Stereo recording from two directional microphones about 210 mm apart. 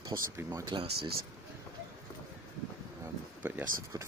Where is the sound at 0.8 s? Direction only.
50° right (ahead or behind).